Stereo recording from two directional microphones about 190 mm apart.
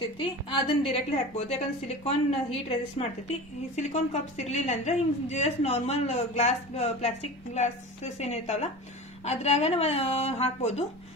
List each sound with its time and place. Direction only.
0.0 s a woman's voice: 30° left (ahead or behind)